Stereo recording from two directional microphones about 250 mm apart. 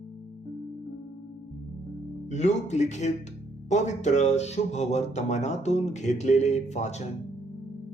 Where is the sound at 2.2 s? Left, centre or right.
Left.